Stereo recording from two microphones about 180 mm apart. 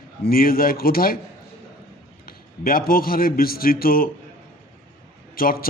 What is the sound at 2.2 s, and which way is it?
A man's voice, 55° left (ahead or behind).